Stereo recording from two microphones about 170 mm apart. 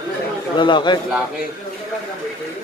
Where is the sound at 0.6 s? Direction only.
25° left (ahead or behind).